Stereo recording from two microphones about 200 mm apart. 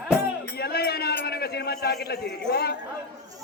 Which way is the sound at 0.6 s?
50° left (ahead or behind).